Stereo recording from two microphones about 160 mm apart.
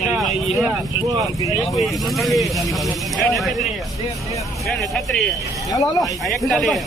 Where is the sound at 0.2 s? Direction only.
Centre (ahead or behind).